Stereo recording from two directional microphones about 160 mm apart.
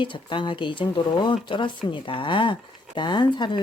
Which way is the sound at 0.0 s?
30° left (ahead or behind).